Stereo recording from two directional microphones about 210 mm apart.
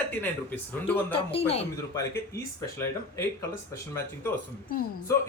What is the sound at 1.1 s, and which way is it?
Speech, 25° left (ahead or behind).